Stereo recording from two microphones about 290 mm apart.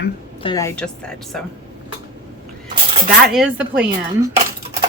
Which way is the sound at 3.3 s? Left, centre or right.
Centre.